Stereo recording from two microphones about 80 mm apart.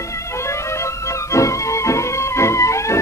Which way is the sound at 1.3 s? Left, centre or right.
Left.